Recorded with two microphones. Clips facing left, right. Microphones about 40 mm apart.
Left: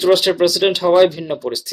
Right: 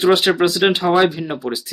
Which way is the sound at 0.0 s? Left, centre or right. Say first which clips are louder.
Left 1 dB; right.